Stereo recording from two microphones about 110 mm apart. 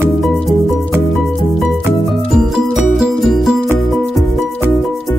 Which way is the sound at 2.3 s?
5° right (ahead or behind).